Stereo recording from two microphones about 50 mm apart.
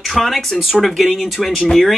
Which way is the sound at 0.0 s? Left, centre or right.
Centre.